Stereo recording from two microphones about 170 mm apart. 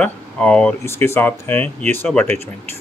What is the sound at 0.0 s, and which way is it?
Speech, 5° left (ahead or behind).